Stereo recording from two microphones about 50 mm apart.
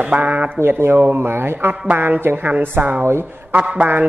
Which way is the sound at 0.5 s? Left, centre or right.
Right.